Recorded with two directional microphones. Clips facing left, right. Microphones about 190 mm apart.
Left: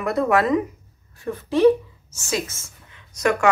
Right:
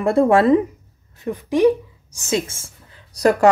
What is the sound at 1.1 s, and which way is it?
Speech, 15° right (ahead or behind).